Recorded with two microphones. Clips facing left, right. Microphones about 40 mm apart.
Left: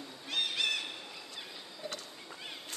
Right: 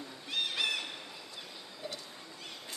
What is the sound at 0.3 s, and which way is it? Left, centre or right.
Bird, centre.